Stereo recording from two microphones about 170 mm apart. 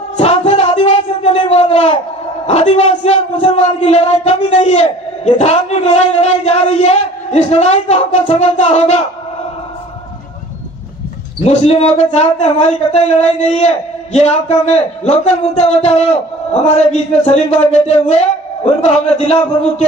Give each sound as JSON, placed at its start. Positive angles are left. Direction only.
{"t": 0.2, "sound": "a sound", "side_deg": 35}
{"t": 2.4, "sound": "speech", "side_deg": 40}
{"t": 11.4, "sound": "speech", "side_deg": 40}